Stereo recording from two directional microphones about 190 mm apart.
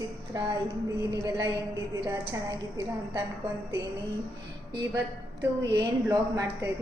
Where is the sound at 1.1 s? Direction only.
20° right (ahead or behind).